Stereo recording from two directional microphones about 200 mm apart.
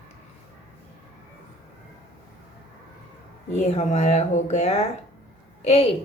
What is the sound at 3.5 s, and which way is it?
Speech, 35° left (ahead or behind).